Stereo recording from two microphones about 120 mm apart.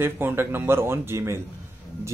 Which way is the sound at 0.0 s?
20° right (ahead or behind).